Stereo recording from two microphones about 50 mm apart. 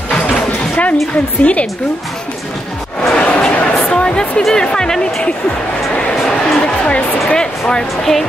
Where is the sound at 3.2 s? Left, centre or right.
Left.